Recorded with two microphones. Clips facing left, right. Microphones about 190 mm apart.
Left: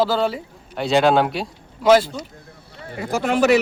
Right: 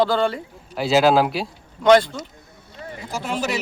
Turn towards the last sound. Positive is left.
turn(degrees=65)  # may be behind; listen again after turning